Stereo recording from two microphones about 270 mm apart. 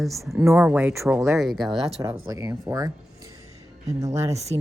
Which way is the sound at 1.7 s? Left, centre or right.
Right.